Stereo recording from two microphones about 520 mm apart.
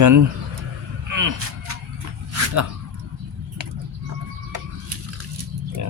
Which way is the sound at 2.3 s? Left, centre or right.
Right.